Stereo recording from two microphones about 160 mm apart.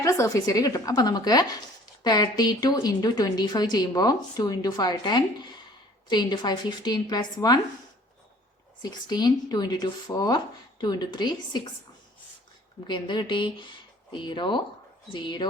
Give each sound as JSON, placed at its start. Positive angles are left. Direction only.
{"t": 0.0, "sound": "a woman's voice", "side_deg": 20}
{"t": 8.8, "sound": "a woman's voice", "side_deg": 25}
{"t": 12.9, "sound": "a woman's voice", "side_deg": 30}